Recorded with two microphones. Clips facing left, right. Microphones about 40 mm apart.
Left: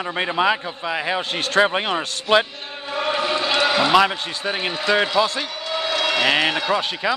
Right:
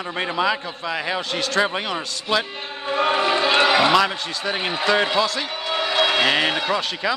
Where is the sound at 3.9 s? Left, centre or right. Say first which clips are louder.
Left 2 dB; centre.